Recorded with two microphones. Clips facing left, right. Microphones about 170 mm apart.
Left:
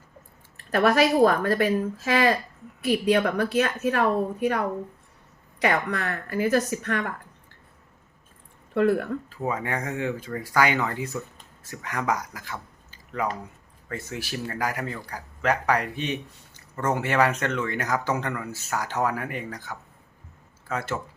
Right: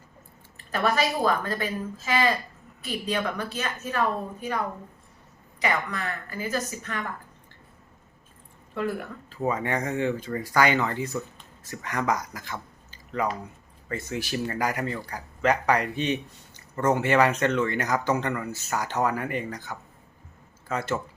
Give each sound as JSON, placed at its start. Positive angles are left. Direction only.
{"t": 0.7, "sound": "speech", "side_deg": 65}
{"t": 8.7, "sound": "speech", "side_deg": 65}
{"t": 9.4, "sound": "speech", "side_deg": 5}